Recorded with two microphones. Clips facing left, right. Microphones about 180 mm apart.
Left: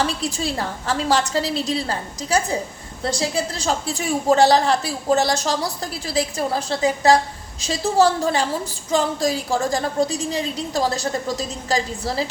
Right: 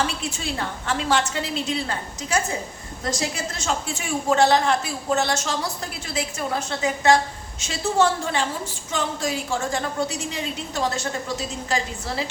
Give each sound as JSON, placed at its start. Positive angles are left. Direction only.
{"t": 0.0, "sound": "a woman's voice", "side_deg": 35}